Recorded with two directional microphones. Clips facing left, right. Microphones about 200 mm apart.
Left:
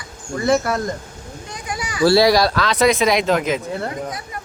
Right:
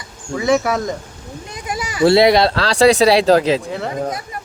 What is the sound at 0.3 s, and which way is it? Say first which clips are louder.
Speech: right 2 dB; centre (ahead or behind).